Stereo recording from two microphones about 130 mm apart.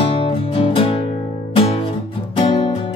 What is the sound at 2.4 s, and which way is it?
Music, 50° left (ahead or behind).